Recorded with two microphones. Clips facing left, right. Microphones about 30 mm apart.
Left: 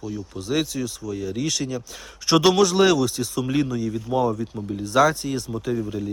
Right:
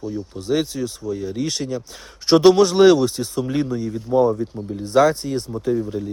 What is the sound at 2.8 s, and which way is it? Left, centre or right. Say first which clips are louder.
Speech: right 5 dB; centre.